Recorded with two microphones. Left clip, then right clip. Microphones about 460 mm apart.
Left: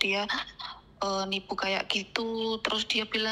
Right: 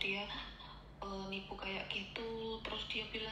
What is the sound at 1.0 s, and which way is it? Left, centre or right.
A woman's voice, left.